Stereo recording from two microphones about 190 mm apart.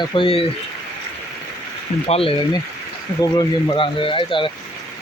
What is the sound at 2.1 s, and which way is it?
Speech, 30° left (ahead or behind).